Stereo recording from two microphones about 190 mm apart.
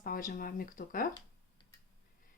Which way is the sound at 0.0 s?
50° left (ahead or behind).